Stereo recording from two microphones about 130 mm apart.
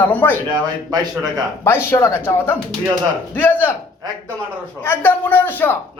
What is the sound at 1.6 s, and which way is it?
A man's voice, 20° left (ahead or behind).